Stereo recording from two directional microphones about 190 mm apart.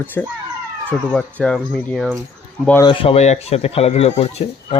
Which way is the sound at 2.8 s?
30° left (ahead or behind).